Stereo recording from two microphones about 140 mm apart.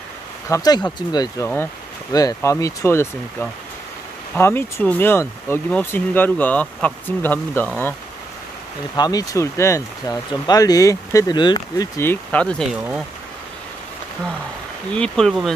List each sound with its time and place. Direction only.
0.5 s speech: 25° left (ahead or behind)
8.9 s speech: 25° left (ahead or behind)
12.0 s speech: 15° left (ahead or behind)
12.7 s speech: 10° right (ahead or behind)
14.9 s speech: 5° left (ahead or behind)